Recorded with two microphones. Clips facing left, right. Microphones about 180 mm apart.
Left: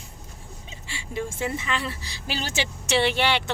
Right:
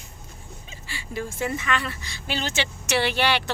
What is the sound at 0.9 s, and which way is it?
A woman's voice, 25° left (ahead or behind).